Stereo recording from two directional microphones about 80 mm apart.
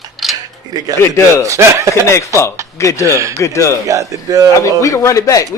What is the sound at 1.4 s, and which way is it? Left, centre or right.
Speech, right.